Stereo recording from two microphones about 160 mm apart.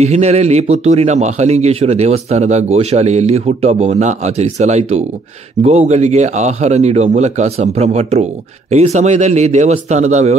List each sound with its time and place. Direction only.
0.0 s a man's voice: 45° right (ahead or behind)